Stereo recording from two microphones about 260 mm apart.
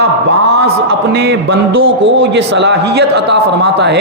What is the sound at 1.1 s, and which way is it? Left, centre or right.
A man's voice, right.